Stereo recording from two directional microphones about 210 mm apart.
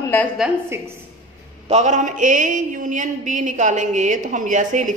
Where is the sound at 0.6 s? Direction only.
10° right (ahead or behind).